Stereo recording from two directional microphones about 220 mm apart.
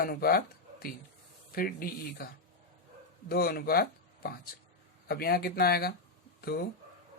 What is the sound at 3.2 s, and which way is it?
Speech, 45° left (ahead or behind).